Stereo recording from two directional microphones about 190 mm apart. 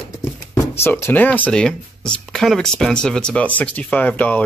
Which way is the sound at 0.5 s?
15° left (ahead or behind).